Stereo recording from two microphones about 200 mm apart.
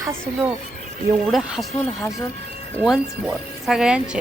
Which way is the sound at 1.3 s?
Centre (ahead or behind).